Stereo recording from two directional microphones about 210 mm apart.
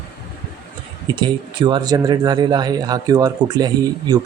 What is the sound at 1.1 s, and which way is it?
Speech, 20° right (ahead or behind).